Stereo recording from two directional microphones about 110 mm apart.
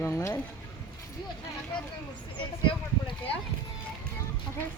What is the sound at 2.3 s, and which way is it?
Speech, 45° left (ahead or behind).